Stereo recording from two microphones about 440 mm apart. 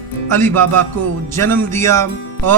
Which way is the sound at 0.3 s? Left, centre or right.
Centre.